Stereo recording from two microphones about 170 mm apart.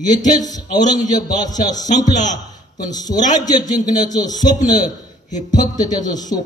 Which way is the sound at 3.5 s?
20° left (ahead or behind).